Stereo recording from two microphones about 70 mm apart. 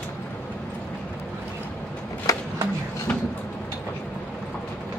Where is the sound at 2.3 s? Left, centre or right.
Left.